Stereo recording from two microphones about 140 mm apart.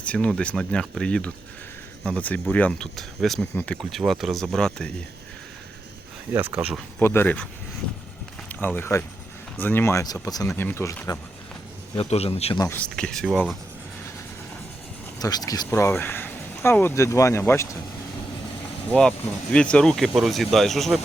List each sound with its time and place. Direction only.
0.0 s speech: 10° left (ahead or behind)
3.5 s speech: 15° left (ahead or behind)
3.8 s speech: centre (ahead or behind)
6.3 s speech: 10° right (ahead or behind)
7.0 s speech: 15° left (ahead or behind)
8.4 s speech: 15° left (ahead or behind)
11.9 s a man's voice: 45° left (ahead or behind)
12.5 s speech: 20° left (ahead or behind)
13.0 s speech: 5° left (ahead or behind)
15.2 s speech: 25° left (ahead or behind)
18.9 s speech: 5° left (ahead or behind)